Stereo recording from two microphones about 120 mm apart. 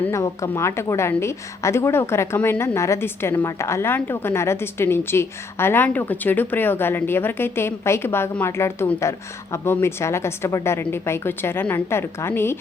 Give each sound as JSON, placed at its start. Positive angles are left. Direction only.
{"t": 0.1, "sound": "a woman's voice", "side_deg": 25}